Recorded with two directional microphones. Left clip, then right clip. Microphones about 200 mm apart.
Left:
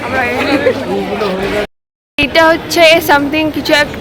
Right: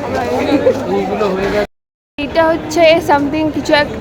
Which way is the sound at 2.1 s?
5° left (ahead or behind).